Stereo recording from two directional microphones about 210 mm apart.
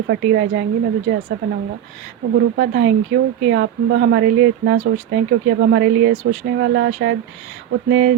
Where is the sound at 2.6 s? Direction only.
55° right (ahead or behind).